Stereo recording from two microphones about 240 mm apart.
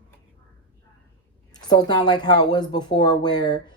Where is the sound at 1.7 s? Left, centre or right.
Centre.